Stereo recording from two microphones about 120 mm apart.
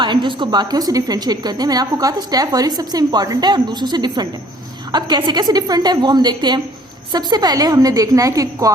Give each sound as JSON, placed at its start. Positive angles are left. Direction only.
{"t": 0.0, "sound": "a woman's voice", "side_deg": -40}